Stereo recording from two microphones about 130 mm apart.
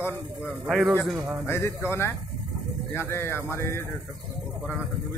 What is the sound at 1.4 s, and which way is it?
Speech, 20° left (ahead or behind).